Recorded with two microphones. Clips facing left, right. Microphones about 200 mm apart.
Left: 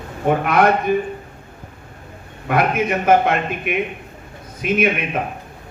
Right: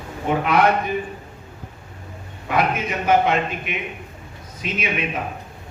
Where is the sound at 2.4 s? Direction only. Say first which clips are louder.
Left 4 dB; 55° left (ahead or behind).